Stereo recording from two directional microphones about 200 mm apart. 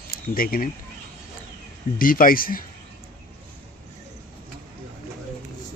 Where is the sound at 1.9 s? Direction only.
45° left (ahead or behind).